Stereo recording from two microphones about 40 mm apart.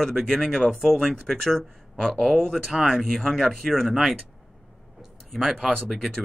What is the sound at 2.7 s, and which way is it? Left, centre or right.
Speech, centre.